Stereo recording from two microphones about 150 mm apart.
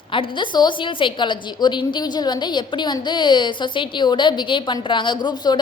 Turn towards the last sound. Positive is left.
turn(degrees=30)  # may be behind; listen again after turning